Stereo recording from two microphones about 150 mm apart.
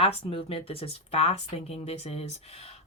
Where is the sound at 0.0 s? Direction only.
40° left (ahead or behind).